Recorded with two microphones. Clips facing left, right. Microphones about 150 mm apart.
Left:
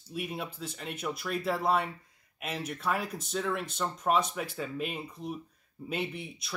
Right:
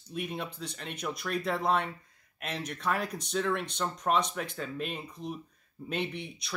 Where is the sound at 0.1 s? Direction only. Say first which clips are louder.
Even; 5° left (ahead or behind).